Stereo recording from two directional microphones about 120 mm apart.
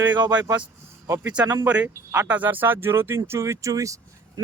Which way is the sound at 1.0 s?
25° right (ahead or behind).